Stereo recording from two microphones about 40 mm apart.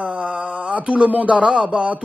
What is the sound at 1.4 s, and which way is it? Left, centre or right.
Speech, centre.